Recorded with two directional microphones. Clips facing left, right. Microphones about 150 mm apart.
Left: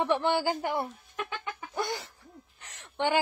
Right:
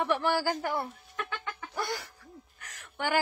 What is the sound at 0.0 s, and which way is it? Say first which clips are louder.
Chicken: left 1 dB; 20° left (ahead or behind).